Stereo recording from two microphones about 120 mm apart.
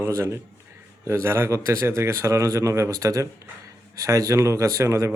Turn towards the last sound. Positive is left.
turn(degrees=-25)  # may be behind; listen again after turning